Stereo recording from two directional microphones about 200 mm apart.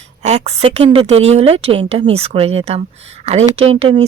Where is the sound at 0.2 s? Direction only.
35° right (ahead or behind).